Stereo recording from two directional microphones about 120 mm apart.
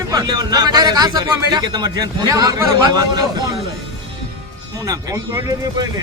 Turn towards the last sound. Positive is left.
turn(degrees=-30)  # may be behind; listen again after turning